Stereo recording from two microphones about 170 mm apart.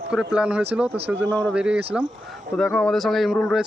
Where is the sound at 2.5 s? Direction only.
5° left (ahead or behind).